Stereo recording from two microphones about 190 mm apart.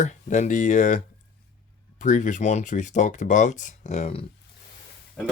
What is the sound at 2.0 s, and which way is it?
Speech, 40° left (ahead or behind).